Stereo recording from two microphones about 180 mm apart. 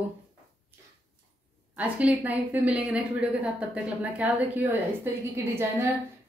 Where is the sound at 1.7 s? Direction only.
10° right (ahead or behind).